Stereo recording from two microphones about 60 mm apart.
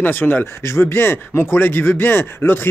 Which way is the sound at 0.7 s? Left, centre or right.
Left.